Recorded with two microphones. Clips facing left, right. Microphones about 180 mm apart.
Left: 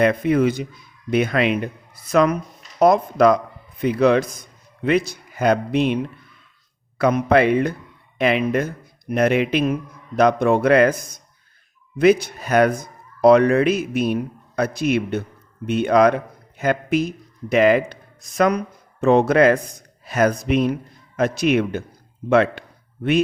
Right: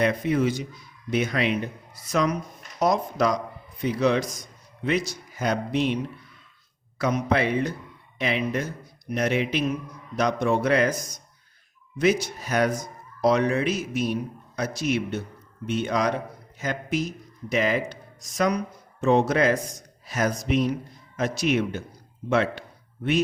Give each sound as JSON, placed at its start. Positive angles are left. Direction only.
{"t": 0.0, "sound": "a man's voice", "side_deg": 55}